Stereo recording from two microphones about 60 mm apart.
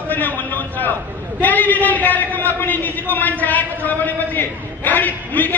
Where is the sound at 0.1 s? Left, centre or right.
Left.